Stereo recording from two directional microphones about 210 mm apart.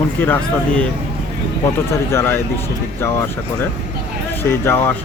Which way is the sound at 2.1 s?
10° left (ahead or behind).